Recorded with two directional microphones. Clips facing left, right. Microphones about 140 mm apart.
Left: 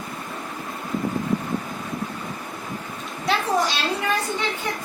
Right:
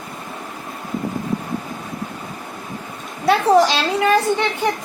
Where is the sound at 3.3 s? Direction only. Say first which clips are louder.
Right 9 dB; 75° right (ahead or behind).